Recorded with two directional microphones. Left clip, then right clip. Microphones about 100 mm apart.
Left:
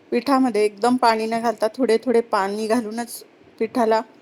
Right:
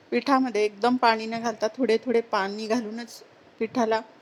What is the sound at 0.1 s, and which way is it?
A woman's voice, 15° left (ahead or behind).